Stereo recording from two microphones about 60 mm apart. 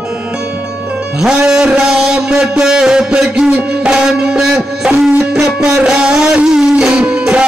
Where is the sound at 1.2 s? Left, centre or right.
Centre.